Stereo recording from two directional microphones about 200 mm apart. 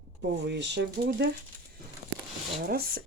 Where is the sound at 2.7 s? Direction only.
50° right (ahead or behind).